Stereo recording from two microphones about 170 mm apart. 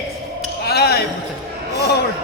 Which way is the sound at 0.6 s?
70° left (ahead or behind).